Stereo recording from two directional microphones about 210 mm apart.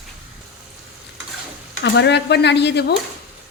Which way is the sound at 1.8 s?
55° left (ahead or behind).